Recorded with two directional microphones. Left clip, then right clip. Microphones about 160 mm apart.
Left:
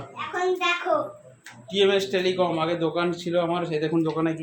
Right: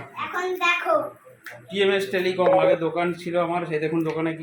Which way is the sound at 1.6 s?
Centre (ahead or behind).